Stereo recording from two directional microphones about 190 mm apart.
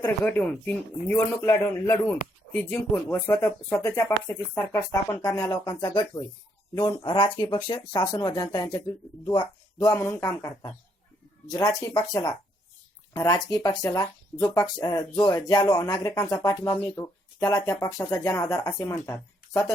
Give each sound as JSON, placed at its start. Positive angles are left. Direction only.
{"t": 0.0, "sound": "speech", "side_deg": 10}